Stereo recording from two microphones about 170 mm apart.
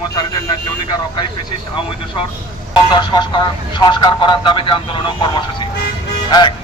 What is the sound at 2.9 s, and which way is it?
Speech, 25° left (ahead or behind).